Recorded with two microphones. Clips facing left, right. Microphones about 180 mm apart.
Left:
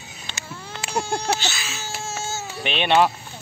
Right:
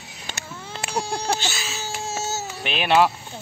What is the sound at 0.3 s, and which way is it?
Baby cry, 60° right (ahead or behind).